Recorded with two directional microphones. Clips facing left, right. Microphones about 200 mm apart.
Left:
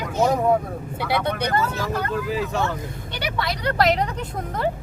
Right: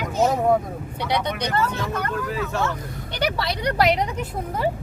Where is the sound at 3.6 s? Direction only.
10° right (ahead or behind).